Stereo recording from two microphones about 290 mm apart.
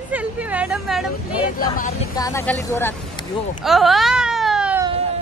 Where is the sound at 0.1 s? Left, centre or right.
Centre.